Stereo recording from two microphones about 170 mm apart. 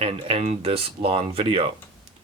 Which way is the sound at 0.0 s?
35° right (ahead or behind).